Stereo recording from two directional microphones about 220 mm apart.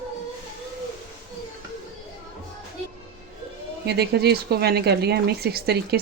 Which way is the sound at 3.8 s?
50° right (ahead or behind).